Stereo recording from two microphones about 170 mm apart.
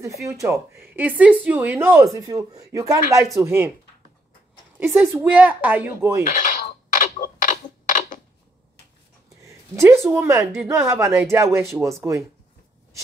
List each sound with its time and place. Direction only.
0.2 s speech: 15° right (ahead or behind)
4.7 s speech: 10° right (ahead or behind)
6.3 s a sound: 50° left (ahead or behind)
9.4 s speech: 15° right (ahead or behind)